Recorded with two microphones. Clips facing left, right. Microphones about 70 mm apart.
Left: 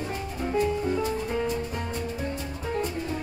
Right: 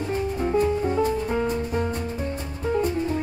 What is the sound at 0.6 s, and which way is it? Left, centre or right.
Music, right.